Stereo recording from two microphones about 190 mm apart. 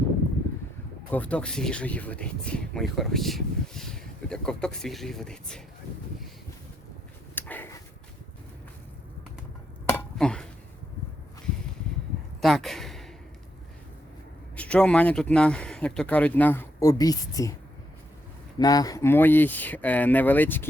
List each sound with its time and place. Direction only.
1.1 s speech: 5° left (ahead or behind)
7.3 s a sound: 10° left (ahead or behind)
9.9 s dishes: 5° left (ahead or behind)
12.4 s a sound: centre (ahead or behind)
14.5 s speech: 5° left (ahead or behind)
18.5 s speech: 20° left (ahead or behind)